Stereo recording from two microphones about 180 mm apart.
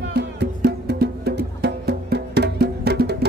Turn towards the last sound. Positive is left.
turn(degrees=-65)  # may be behind; listen again after turning